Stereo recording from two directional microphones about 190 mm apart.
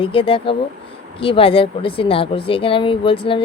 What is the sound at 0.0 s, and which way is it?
Speech, 30° left (ahead or behind).